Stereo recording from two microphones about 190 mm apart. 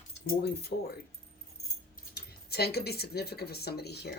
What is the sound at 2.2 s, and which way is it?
Speech, 55° left (ahead or behind).